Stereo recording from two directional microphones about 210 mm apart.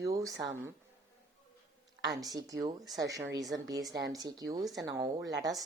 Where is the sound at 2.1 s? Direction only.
15° right (ahead or behind).